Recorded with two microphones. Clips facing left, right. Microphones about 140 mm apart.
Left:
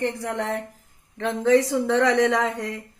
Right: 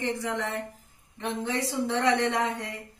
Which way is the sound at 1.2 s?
90° left.